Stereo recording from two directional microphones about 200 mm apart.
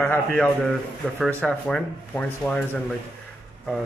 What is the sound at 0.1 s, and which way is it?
Speech, 5° left (ahead or behind).